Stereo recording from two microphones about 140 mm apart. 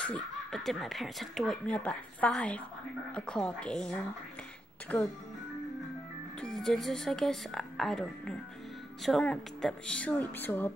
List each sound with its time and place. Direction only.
0.0 s speech: 5° left (ahead or behind)
6.4 s speech: 5° left (ahead or behind)